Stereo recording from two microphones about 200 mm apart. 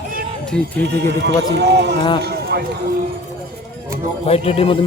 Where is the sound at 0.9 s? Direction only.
60° right (ahead or behind).